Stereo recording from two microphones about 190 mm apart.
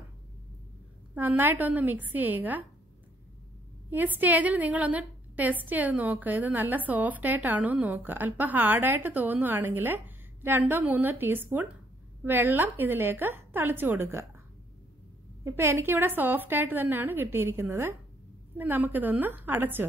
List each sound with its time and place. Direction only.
1.1 s a woman's voice: 10° right (ahead or behind)
3.9 s a woman's voice: 10° right (ahead or behind)
15.4 s a woman's voice: 15° right (ahead or behind)